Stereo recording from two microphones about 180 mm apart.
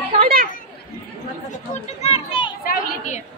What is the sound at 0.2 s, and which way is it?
Chatter, 55° right (ahead or behind).